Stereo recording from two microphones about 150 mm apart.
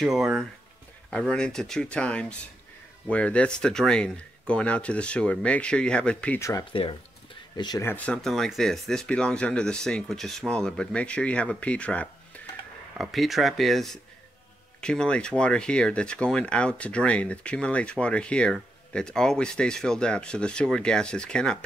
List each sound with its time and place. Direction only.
0.0 s speech: centre (ahead or behind)
6.7 s speech: 35° left (ahead or behind)
7.8 s speech: 10° left (ahead or behind)